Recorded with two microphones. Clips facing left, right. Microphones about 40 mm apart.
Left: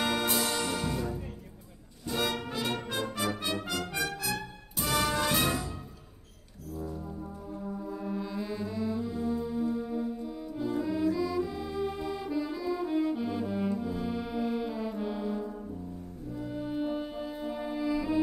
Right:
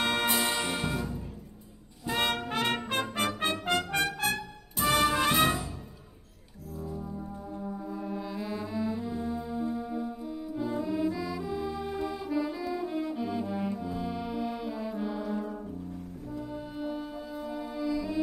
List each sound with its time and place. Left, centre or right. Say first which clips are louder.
0.0 s music: right 1 dB; right
0.4 s music: right 1 dB; right
2.0 s brass instrument: right 2 dB; right
3.6 s music: right 5 dB; right
6.8 s brass instrument: right 1 dB; centre
16.4 s music: left 6 dB; centre